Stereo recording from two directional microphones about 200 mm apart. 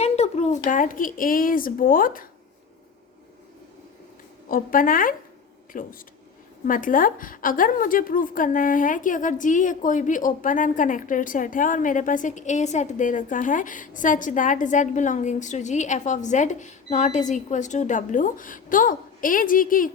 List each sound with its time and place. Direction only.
0.0 s speech: 35° left (ahead or behind)
4.4 s a woman's voice: 45° left (ahead or behind)